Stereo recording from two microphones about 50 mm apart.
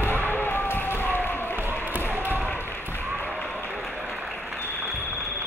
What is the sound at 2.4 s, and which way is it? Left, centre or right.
Basketball bounce, left.